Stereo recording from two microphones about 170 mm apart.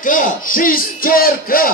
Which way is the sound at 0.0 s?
55° left (ahead or behind).